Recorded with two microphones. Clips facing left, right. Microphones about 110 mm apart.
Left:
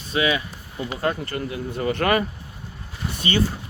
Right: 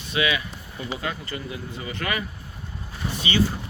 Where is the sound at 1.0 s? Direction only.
55° left (ahead or behind).